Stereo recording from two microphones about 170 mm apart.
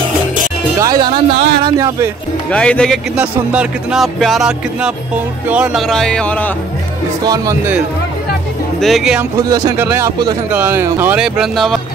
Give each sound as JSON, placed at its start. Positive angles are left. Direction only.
{"t": 0.7, "sound": "speech", "side_deg": -25}
{"t": 2.5, "sound": "music", "side_deg": 5}
{"t": 3.2, "sound": "music", "side_deg": -5}
{"t": 7.2, "sound": "speech", "side_deg": -20}
{"t": 8.8, "sound": "music", "side_deg": 0}
{"t": 9.4, "sound": "speech", "side_deg": -15}